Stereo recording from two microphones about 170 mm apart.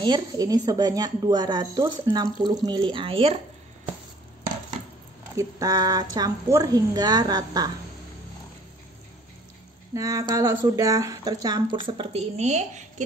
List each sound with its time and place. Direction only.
0.0 s speech: 25° right (ahead or behind)
5.3 s speech: 20° right (ahead or behind)
9.9 s speech: 20° right (ahead or behind); by 13.0 s 45° right (ahead or behind)